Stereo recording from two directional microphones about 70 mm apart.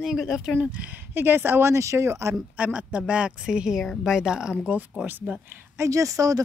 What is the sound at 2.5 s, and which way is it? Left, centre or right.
Speech, right.